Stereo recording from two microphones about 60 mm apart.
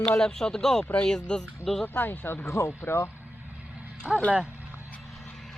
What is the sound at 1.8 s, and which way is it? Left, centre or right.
Speech, left.